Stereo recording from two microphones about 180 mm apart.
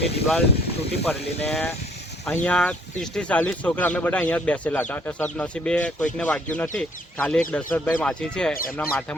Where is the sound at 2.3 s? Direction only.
5° left (ahead or behind).